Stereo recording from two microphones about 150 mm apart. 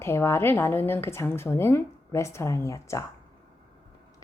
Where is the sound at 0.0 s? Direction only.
15° left (ahead or behind).